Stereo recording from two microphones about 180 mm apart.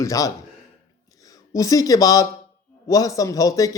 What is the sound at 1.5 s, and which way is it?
A man's voice, 20° left (ahead or behind).